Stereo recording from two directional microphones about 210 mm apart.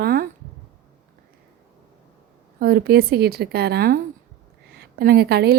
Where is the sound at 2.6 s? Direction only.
45° right (ahead or behind).